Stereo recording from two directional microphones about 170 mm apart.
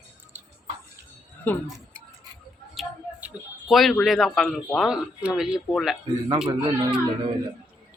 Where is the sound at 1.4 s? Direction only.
10° left (ahead or behind).